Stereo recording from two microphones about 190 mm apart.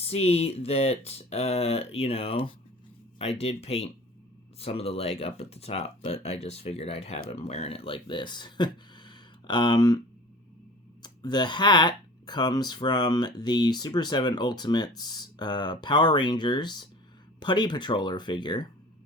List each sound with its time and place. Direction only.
0.0 s speech: 35° left (ahead or behind)
11.0 s speech: 20° left (ahead or behind)